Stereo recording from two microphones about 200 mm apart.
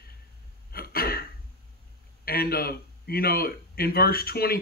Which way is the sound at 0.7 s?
50° left (ahead or behind).